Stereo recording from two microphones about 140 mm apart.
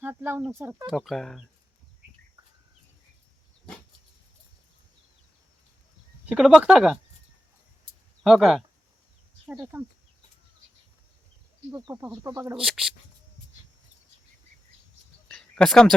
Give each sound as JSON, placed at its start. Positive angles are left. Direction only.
{"t": 0.0, "sound": "speech", "side_deg": -15}
{"t": 0.9, "sound": "speech", "side_deg": 0}
{"t": 6.2, "sound": "speech", "side_deg": -5}
{"t": 8.2, "sound": "speech", "side_deg": -5}
{"t": 11.7, "sound": "speech", "side_deg": -30}
{"t": 12.5, "sound": "speech", "side_deg": -5}
{"t": 15.3, "sound": "a sound", "side_deg": 5}